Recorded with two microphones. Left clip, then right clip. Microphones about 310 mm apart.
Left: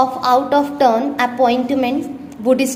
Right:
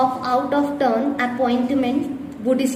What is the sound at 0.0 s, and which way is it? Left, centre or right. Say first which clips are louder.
A woman's voice: left 5 dB; left.